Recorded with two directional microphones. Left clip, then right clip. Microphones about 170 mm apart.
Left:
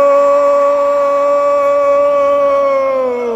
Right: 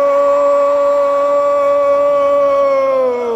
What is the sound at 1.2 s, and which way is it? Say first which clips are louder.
Howl: left 1 dB; 10° left (ahead or behind).